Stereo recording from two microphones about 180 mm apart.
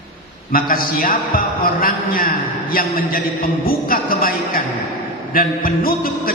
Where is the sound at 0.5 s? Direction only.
55° left (ahead or behind).